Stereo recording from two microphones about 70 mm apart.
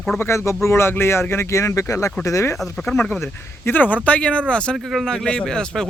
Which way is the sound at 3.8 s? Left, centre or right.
Left.